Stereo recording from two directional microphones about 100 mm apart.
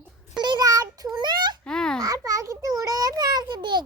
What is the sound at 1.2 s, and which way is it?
Speech, 45° right (ahead or behind).